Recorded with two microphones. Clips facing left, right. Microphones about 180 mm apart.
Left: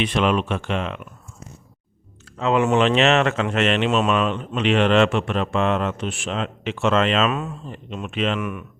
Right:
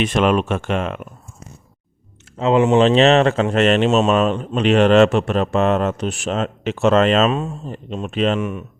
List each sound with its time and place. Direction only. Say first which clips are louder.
0.0 s speech: right 4 dB; 45° right (ahead or behind)
2.4 s speech: right 4 dB; 25° right (ahead or behind)
7.3 s speech: right 4 dB; 25° right (ahead or behind)